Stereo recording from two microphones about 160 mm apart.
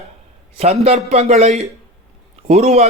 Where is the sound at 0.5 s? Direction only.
40° right (ahead or behind).